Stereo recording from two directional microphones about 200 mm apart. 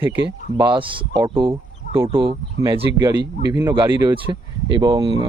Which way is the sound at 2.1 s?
25° right (ahead or behind).